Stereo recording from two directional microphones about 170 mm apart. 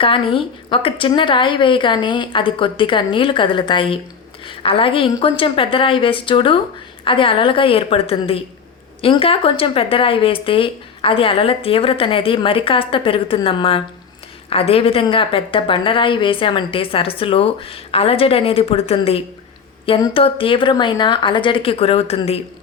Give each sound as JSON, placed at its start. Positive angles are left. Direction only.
{"t": 0.0, "sound": "a woman's voice", "side_deg": 30}